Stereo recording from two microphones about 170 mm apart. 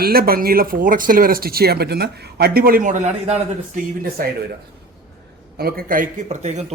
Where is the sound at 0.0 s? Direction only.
65° right (ahead or behind); by 3.3 s 45° right (ahead or behind).